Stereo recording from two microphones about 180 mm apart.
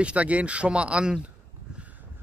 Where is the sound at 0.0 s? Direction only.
5° right (ahead or behind).